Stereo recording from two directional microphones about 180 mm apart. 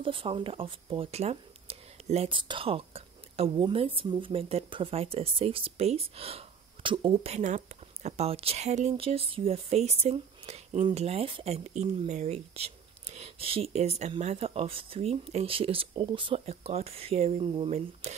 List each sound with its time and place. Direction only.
0.0 s speech: 30° right (ahead or behind)